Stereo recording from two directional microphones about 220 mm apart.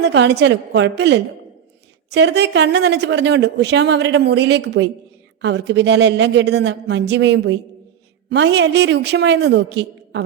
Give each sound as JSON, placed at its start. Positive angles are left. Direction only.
{"t": 0.0, "sound": "speech", "side_deg": -50}